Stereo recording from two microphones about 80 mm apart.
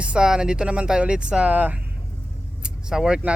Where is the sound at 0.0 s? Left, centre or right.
Centre.